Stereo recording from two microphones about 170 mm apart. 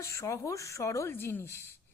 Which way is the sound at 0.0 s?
20° left (ahead or behind).